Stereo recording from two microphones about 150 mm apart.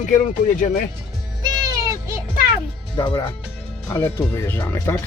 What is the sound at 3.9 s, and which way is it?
Speech, 15° left (ahead or behind).